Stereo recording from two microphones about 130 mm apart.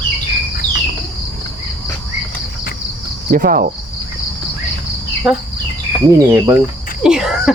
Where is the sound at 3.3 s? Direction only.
90° right.